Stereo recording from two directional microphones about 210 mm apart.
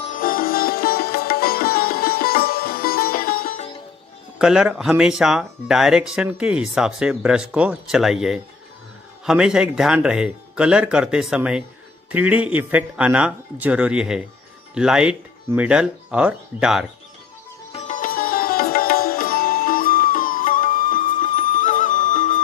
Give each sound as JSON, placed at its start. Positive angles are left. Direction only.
{"t": 0.0, "sound": "sitar", "side_deg": 40}
{"t": 4.4, "sound": "speech", "side_deg": -5}
{"t": 17.7, "sound": "sitar", "side_deg": 40}